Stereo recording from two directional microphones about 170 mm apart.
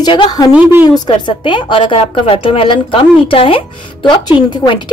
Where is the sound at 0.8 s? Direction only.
25° left (ahead or behind).